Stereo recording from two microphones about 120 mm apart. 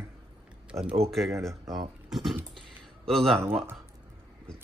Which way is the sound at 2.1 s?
Centre (ahead or behind).